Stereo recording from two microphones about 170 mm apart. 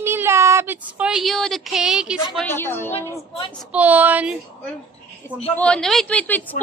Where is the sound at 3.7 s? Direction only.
10° right (ahead or behind).